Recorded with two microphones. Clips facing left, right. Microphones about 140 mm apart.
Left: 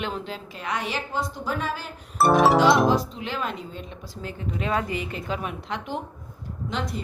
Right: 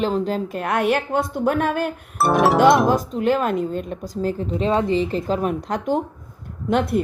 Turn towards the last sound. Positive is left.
turn(degrees=-60)  # may be behind; listen again after turning